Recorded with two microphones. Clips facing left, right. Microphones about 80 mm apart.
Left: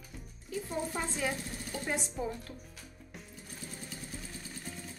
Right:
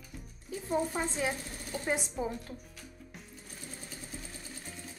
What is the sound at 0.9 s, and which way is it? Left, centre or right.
Speech, centre.